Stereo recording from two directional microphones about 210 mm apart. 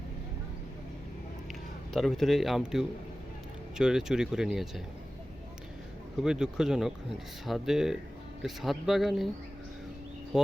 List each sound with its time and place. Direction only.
1.9 s speech: centre (ahead or behind)
6.1 s speech: 5° right (ahead or behind)
10.3 s speech: centre (ahead or behind)